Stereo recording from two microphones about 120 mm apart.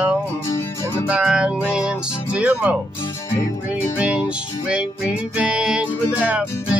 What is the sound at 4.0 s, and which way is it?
Music, 10° right (ahead or behind).